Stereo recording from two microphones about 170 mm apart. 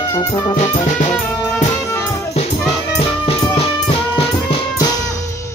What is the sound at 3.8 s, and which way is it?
Music, 30° left (ahead or behind).